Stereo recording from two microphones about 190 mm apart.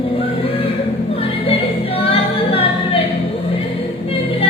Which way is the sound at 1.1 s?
30° left (ahead or behind).